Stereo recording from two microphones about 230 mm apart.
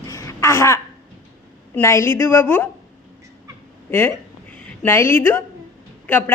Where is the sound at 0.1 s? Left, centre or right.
Centre.